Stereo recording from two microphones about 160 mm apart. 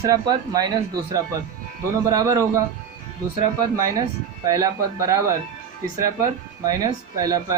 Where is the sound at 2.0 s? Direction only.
20° right (ahead or behind).